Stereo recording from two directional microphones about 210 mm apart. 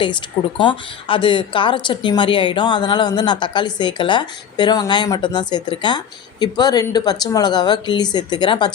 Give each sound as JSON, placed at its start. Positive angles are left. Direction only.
{"t": 0.6, "sound": "a woman's voice", "side_deg": 25}